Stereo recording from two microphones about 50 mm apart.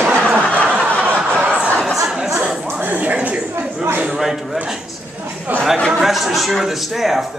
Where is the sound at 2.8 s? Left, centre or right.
Right.